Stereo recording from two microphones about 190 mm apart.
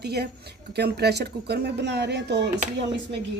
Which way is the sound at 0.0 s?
60° right (ahead or behind).